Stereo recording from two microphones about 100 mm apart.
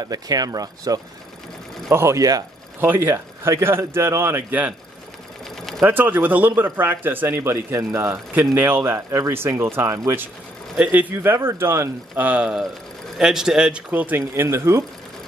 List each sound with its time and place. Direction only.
0.0 s speech: 40° right (ahead or behind)
1.9 s speech: 25° right (ahead or behind)
2.8 s speech: 25° right (ahead or behind)
5.9 s speech: 20° right (ahead or behind)
10.8 s a man's voice: 15° right (ahead or behind)
12.3 s a man's voice: 15° right (ahead or behind)